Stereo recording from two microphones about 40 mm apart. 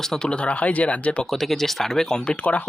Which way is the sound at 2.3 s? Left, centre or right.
Left.